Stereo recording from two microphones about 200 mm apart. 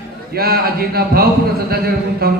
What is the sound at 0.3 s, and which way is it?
A man's voice, 50° right (ahead or behind).